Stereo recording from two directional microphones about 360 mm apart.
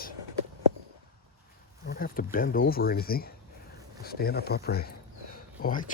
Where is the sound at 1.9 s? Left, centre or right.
Left.